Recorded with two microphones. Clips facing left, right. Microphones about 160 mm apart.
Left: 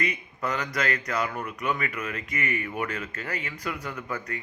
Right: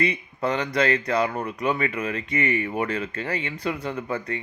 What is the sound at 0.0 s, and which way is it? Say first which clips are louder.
A man's voice: right 6 dB; 30° right (ahead or behind).